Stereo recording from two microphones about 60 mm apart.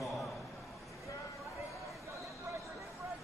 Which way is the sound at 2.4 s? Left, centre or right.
Right.